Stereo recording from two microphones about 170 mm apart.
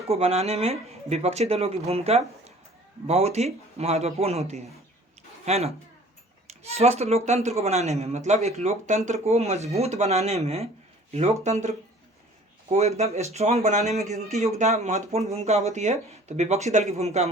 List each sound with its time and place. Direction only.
0.1 s speech: 35° right (ahead or behind)
13.0 s speech: 40° right (ahead or behind)